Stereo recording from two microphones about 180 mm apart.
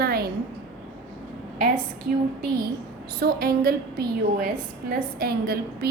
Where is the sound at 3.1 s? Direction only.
60° right (ahead or behind).